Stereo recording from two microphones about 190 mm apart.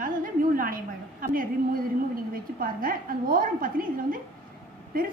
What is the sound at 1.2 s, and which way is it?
A woman's voice, 50° right (ahead or behind).